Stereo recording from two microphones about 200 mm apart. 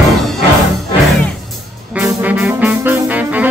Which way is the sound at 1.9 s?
10° right (ahead or behind).